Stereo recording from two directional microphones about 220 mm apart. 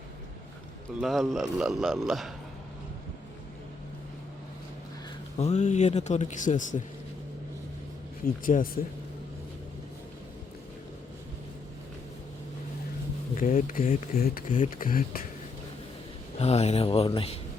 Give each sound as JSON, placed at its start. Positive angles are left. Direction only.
{"t": 1.0, "sound": "speech", "side_deg": 0}
{"t": 5.4, "sound": "speech", "side_deg": 30}
{"t": 8.2, "sound": "speech", "side_deg": 40}
{"t": 13.3, "sound": "speech", "side_deg": 35}
{"t": 16.4, "sound": "speech", "side_deg": 30}